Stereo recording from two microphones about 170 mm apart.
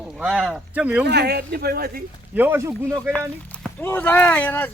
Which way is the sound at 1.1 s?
75° right (ahead or behind).